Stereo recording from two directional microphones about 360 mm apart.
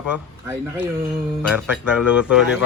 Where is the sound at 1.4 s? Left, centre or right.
Centre.